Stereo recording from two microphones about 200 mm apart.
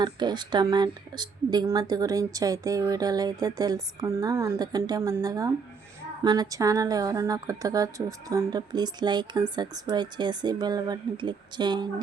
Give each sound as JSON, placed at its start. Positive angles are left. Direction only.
{"t": 0.0, "sound": "a woman's voice", "side_deg": -20}